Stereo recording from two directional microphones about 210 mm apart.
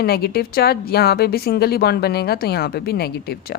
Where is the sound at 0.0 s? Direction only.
50° left (ahead or behind).